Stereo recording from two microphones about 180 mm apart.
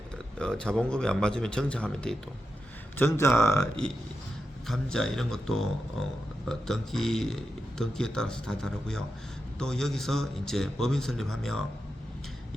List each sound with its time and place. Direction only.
0.3 s speech: 5° left (ahead or behind)
4.7 s speech: centre (ahead or behind)